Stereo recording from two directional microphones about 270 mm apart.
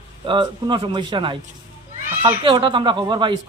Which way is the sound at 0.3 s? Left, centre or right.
Centre.